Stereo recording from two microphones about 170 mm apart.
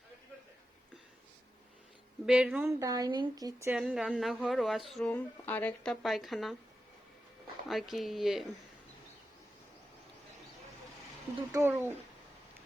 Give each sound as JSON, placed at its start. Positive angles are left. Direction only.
{"t": 2.2, "sound": "speech", "side_deg": -5}
{"t": 2.6, "sound": "speech", "side_deg": -20}
{"t": 3.8, "sound": "speech", "side_deg": 0}
{"t": 7.7, "sound": "speech", "side_deg": 0}
{"t": 11.5, "sound": "speech", "side_deg": -10}